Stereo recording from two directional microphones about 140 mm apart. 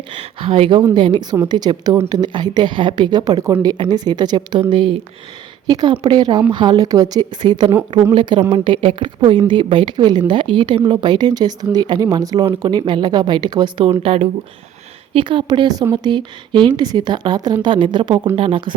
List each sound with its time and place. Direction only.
0.1 s a woman's voice: 40° right (ahead or behind)